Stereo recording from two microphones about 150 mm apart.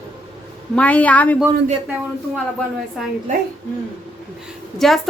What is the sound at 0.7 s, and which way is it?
Speech, 10° left (ahead or behind).